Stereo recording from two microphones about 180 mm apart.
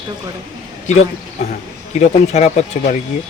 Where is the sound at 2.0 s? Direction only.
40° left (ahead or behind).